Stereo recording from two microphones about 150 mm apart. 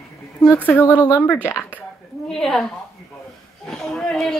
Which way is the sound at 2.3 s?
5° left (ahead or behind).